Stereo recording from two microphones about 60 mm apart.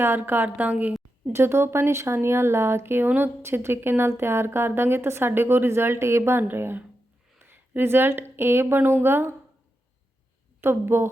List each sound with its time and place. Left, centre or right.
0.0 s a woman's voice: right
1.3 s a woman's voice: right
7.3 s a sound: right
7.7 s a woman's voice: right
10.6 s speech: right